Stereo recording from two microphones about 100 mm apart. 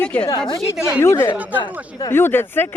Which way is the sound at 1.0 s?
25° left (ahead or behind).